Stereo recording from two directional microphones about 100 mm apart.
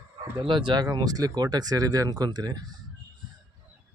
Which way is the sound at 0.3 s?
55° right (ahead or behind).